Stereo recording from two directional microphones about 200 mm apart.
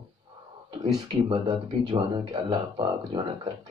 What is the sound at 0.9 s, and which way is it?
Speech, 20° right (ahead or behind).